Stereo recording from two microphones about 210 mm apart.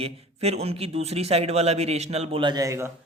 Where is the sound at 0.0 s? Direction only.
30° right (ahead or behind).